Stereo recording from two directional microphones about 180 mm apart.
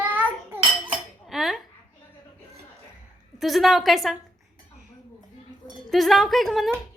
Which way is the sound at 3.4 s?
Centre (ahead or behind).